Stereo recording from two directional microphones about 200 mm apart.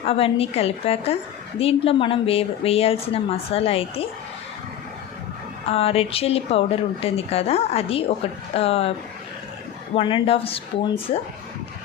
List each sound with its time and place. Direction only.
0.0 s a woman's voice: 30° left (ahead or behind)
5.7 s a woman's voice: 30° left (ahead or behind)
9.9 s a woman's voice: 25° left (ahead or behind)